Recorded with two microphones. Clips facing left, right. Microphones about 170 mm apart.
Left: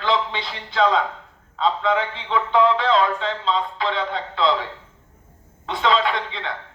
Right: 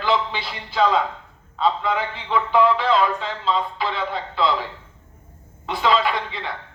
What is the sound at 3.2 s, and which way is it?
Speech, 5° right (ahead or behind).